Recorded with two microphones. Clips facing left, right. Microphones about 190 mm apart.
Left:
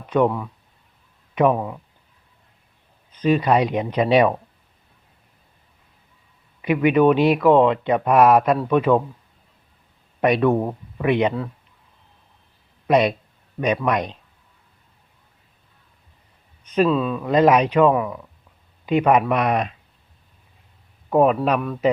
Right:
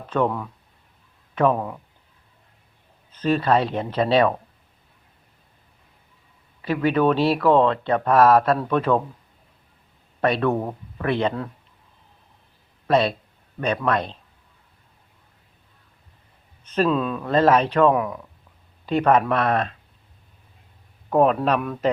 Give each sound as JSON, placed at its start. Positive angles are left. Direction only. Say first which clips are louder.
{"t": 0.1, "sound": "speech", "louder": "left 4 dB", "side_deg": 10}
{"t": 3.2, "sound": "speech", "louder": "left 2 dB", "side_deg": 10}
{"t": 6.6, "sound": "speech", "louder": "left 4 dB", "side_deg": 15}
{"t": 10.2, "sound": "speech", "louder": "left 3 dB", "side_deg": 15}
{"t": 12.9, "sound": "speech", "louder": "left 2 dB", "side_deg": 15}
{"t": 16.6, "sound": "speech", "louder": "left 2 dB", "side_deg": 5}
{"t": 17.3, "sound": "speech", "louder": "left 2 dB", "side_deg": 10}
{"t": 18.9, "sound": "speech", "louder": "left 1 dB", "side_deg": 10}
{"t": 21.1, "sound": "speech", "louder": "left 1 dB", "side_deg": 5}